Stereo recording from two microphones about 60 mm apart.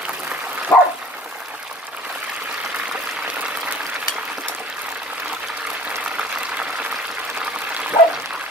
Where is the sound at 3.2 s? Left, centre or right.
Right.